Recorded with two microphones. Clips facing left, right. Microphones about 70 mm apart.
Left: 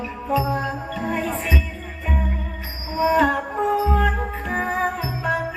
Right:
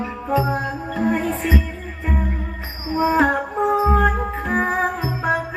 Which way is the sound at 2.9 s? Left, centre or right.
Right.